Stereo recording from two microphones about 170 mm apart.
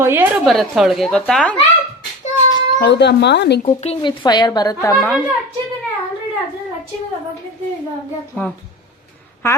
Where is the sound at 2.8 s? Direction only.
80° left.